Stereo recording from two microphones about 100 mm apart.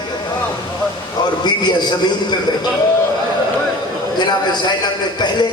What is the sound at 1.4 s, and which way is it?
Speech, 45° left (ahead or behind).